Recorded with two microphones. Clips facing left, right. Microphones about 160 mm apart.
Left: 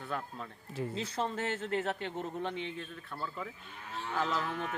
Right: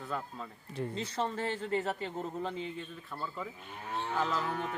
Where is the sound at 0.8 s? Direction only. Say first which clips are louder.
Even; 5° left (ahead or behind).